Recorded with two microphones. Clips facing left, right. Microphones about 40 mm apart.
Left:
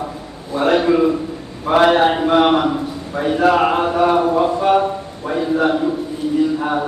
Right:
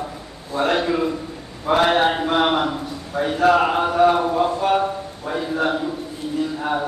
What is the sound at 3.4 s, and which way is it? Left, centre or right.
Speech, left.